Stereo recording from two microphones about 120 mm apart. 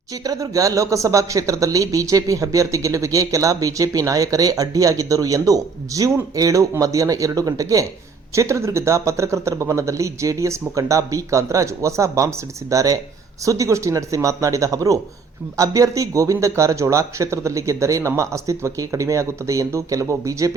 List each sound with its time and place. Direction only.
0.3 s speech: 30° right (ahead or behind)